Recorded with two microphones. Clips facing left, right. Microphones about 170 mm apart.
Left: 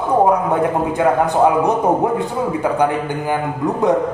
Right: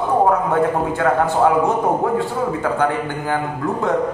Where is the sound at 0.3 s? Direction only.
15° left (ahead or behind).